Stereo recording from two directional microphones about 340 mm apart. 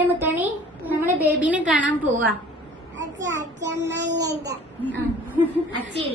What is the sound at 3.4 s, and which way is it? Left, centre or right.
Child singing, right.